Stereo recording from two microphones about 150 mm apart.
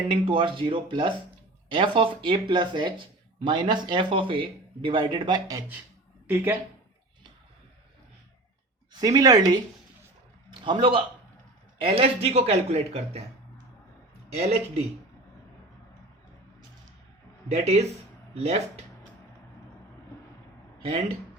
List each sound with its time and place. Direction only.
0.1 s a woman's voice: 35° right (ahead or behind); by 6.6 s 15° right (ahead or behind)
8.9 s a man's voice: 25° right (ahead or behind); by 13.2 s 45° right (ahead or behind)
17.5 s speech: 45° right (ahead or behind)
20.8 s speech: 45° right (ahead or behind)